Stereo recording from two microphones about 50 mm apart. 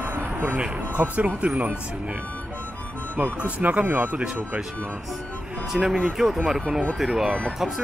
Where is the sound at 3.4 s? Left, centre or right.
Right.